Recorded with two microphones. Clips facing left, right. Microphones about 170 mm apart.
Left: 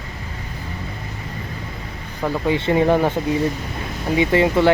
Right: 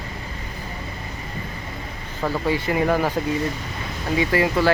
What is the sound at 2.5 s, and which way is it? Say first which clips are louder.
Speech: left 5 dB; 25° left (ahead or behind).